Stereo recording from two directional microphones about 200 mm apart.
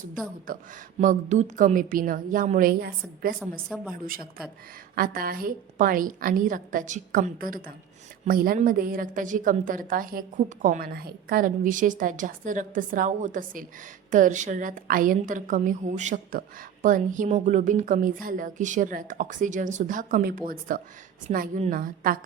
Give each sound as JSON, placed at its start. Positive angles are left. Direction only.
{"t": 0.4, "sound": "a woman's voice", "side_deg": -45}